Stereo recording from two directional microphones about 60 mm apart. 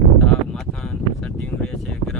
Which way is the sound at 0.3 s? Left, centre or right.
Centre.